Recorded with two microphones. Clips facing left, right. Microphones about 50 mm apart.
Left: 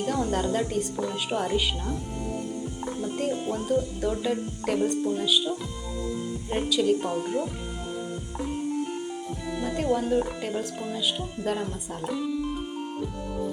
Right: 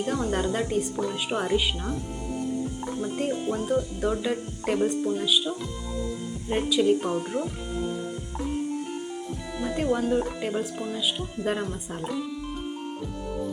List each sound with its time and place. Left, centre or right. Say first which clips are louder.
0.0 s speech: even; centre
2.3 s music: right 7 dB; centre
4.2 s speech: left 1 dB; centre
6.5 s speech: right 2 dB; centre
7.0 s speech: even; centre
7.9 s music: right 2 dB; centre
9.6 s speech: right 1 dB; centre
12.0 s music: left 4 dB; centre